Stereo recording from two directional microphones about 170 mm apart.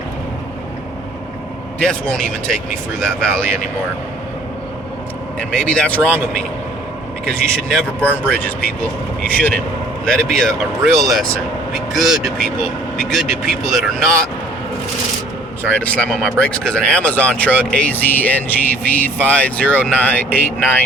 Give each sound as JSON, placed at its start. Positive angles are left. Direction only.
{"t": 1.8, "sound": "speech", "side_deg": 5}
{"t": 5.4, "sound": "speech", "side_deg": 5}
{"t": 15.7, "sound": "speech", "side_deg": 10}